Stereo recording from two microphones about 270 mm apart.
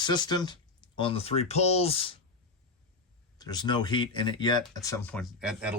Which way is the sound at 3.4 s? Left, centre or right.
Centre.